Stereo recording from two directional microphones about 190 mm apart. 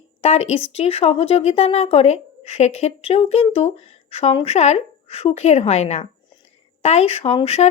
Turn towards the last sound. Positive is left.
turn(degrees=35)  # may be behind; listen again after turning